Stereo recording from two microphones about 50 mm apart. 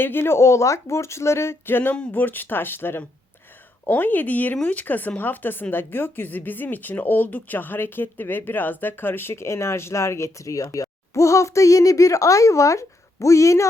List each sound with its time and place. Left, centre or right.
0.0 s speech: left
1.6 s speech: left